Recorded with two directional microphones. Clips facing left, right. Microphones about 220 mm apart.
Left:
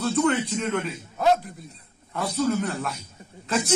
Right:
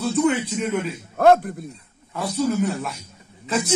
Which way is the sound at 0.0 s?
10° right (ahead or behind).